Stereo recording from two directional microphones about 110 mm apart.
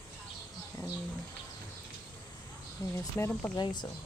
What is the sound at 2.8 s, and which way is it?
Speech, 30° left (ahead or behind).